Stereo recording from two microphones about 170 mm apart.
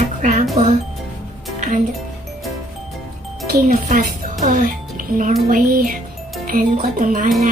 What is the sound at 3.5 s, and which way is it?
A child's voice, 55° right (ahead or behind).